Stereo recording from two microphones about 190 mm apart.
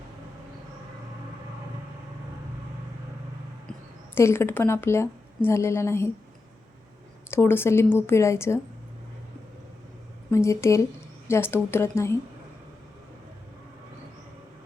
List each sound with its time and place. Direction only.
3.7 s speech: 15° left (ahead or behind)
7.3 s speech: 10° left (ahead or behind)
10.3 s speech: 15° left (ahead or behind)